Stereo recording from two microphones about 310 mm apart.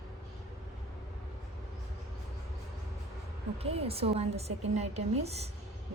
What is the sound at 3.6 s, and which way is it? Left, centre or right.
A woman's voice, centre.